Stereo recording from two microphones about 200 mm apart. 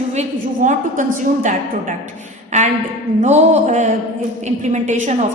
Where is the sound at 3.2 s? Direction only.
35° right (ahead or behind).